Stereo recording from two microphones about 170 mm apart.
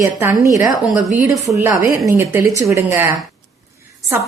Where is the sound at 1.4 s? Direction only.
20° right (ahead or behind).